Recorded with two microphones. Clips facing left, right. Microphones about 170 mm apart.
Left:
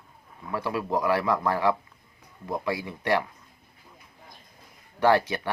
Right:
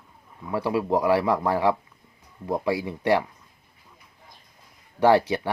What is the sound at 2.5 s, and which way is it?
Speech, 30° right (ahead or behind).